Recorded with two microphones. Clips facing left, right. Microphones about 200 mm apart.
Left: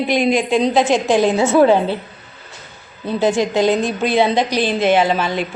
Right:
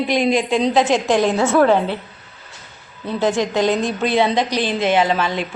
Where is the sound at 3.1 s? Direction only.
5° left (ahead or behind).